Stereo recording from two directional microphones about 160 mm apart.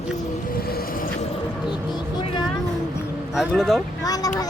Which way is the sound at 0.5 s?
70° left (ahead or behind).